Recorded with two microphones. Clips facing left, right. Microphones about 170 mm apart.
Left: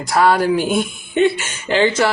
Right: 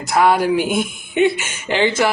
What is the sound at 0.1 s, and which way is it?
Speech, 20° right (ahead or behind).